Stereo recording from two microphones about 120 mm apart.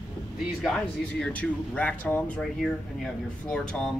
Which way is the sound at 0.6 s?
5° left (ahead or behind).